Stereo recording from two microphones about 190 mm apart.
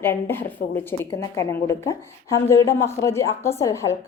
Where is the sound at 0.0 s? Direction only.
10° left (ahead or behind).